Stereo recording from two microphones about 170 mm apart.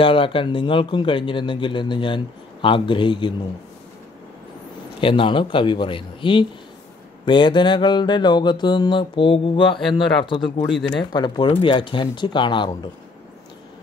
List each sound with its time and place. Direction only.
0.0 s speech: 30° left (ahead or behind)
5.0 s speech: 30° left (ahead or behind)